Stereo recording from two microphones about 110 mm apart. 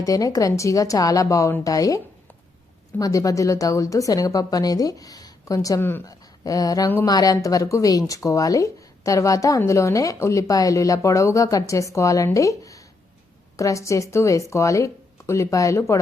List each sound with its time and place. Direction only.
0.0 s speech: 30° left (ahead or behind)
3.0 s speech: 30° left (ahead or behind)